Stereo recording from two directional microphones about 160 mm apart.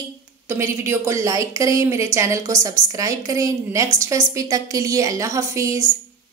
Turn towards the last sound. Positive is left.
turn(degrees=-20)  # may be behind; listen again after turning